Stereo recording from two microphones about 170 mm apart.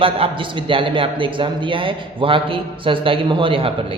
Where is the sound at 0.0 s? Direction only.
30° right (ahead or behind).